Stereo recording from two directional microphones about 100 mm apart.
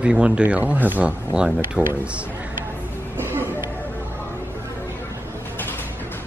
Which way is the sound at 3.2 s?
20° right (ahead or behind).